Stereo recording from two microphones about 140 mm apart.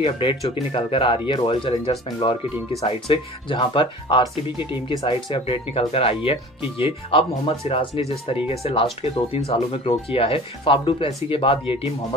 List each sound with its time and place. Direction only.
0.0 s speech: 40° left (ahead or behind)
2.8 s speech: 45° left (ahead or behind)